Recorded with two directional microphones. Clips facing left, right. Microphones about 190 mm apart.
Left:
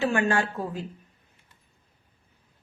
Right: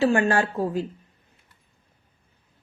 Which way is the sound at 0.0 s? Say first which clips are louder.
Right 4 dB; 35° right (ahead or behind).